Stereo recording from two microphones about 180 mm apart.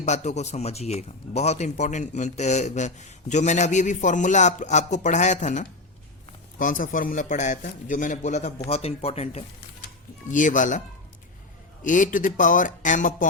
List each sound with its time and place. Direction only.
0.0 s a man's voice: 40° left (ahead or behind)
10.3 s a man's voice: 45° left (ahead or behind)